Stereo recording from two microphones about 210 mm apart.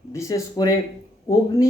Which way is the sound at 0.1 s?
15° left (ahead or behind).